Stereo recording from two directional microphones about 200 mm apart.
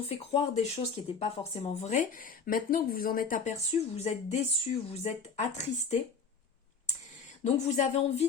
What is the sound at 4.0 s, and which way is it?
Speech, 35° left (ahead or behind).